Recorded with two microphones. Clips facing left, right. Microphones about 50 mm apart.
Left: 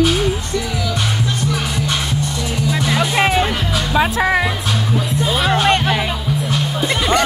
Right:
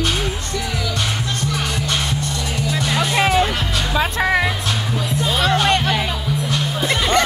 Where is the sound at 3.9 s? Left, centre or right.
Centre.